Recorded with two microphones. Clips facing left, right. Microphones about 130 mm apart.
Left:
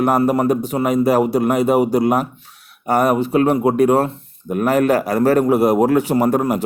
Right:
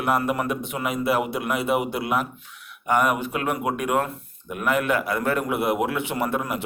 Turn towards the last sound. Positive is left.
turn(degrees=40)  # may be behind; listen again after turning